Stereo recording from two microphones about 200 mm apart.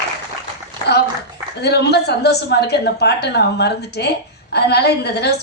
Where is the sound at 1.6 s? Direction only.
55° left (ahead or behind).